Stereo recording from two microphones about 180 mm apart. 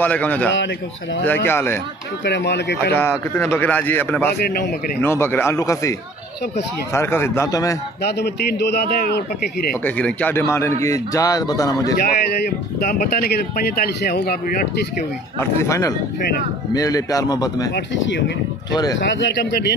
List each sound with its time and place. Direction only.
0.0 s speech: 10° left (ahead or behind)
2.2 s speech: 70° left (ahead or behind)
3.0 s speech: 10° left (ahead or behind)
4.4 s speech: 60° left (ahead or behind)
5.0 s speech: 15° left (ahead or behind)
8.0 s speech: 65° left (ahead or behind)
9.8 s speech: 10° left (ahead or behind)
12.8 s speech: 55° left (ahead or behind)
15.3 s speech: 15° left (ahead or behind)
19.0 s speech: 80° left